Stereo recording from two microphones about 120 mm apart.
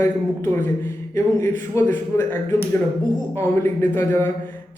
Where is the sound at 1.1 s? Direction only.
20° left (ahead or behind).